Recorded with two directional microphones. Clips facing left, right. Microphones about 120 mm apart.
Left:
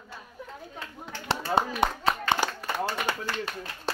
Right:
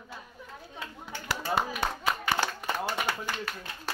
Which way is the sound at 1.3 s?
25° left (ahead or behind).